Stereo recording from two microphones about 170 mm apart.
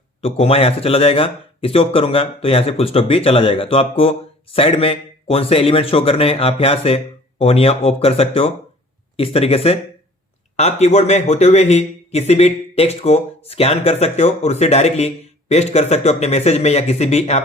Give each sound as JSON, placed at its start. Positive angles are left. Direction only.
{"t": 0.2, "sound": "a man's voice", "side_deg": 35}